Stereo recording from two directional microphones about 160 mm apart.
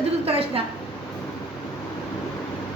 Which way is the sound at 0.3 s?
35° right (ahead or behind).